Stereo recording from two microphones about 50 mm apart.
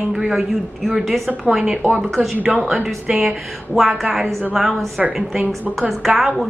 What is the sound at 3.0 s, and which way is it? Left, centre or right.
Speech, right.